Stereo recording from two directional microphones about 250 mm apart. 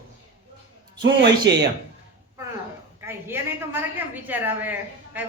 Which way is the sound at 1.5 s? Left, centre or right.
Right.